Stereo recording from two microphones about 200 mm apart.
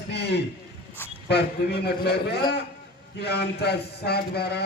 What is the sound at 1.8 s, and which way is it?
A man's voice, 55° left (ahead or behind).